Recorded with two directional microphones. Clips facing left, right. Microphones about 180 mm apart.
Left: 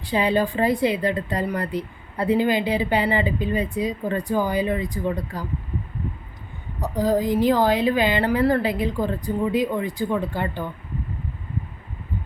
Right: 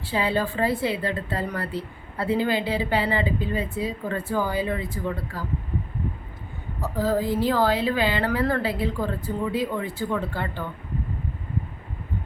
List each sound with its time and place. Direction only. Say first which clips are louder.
0.0 s speech: left 4 dB; 15° left (ahead or behind)
6.7 s speech: left 3 dB; 15° left (ahead or behind)